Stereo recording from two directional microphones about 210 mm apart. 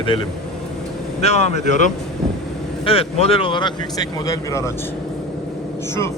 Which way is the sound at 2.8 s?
25° left (ahead or behind).